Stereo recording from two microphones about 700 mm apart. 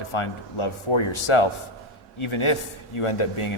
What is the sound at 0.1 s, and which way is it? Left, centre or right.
A man's voice, left.